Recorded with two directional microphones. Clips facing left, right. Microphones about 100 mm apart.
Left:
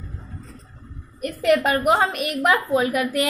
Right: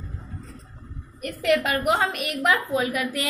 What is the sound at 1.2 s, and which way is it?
A woman's voice, 40° left (ahead or behind).